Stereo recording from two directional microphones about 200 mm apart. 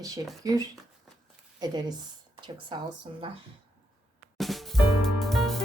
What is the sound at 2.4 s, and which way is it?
Speech, 25° right (ahead or behind).